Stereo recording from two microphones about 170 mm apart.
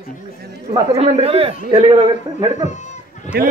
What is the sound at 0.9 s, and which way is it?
A man's voice, 35° right (ahead or behind).